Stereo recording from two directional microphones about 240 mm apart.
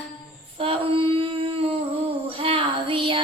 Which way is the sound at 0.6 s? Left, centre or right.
Right.